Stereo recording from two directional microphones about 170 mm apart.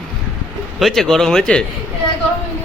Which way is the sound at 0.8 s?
Centre (ahead or behind).